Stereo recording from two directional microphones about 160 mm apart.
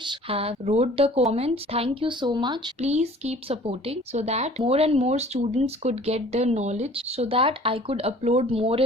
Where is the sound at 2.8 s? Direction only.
45° right (ahead or behind).